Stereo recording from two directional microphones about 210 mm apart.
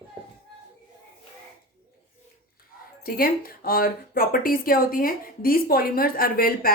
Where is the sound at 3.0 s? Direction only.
45° left (ahead or behind).